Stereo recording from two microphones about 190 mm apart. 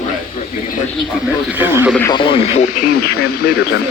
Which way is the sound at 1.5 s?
10° right (ahead or behind).